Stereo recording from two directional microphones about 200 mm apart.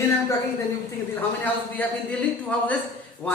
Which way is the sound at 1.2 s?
10° left (ahead or behind).